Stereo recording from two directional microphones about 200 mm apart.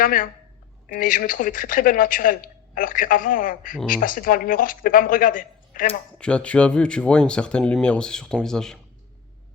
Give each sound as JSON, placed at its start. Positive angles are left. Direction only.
{"t": 0.0, "sound": "speech", "side_deg": 45}
{"t": 6.1, "sound": "speech", "side_deg": 5}